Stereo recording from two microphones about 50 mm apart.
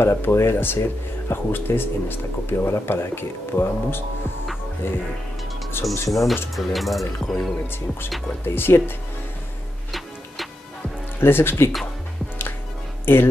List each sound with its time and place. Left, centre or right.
0.0 s speech: left
5.9 s speech: centre
8.5 s speech: left
9.9 s music: centre
11.1 s speech: left
13.0 s speech: left